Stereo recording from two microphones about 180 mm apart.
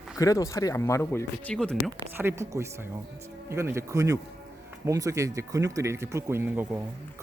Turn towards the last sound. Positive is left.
turn(degrees=-10)  # may be behind; listen again after turning